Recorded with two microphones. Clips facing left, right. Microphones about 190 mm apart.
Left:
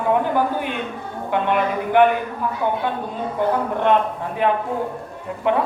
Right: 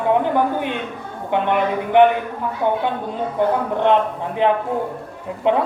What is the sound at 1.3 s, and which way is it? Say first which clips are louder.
Speech: right 1 dB; 20° right (ahead or behind).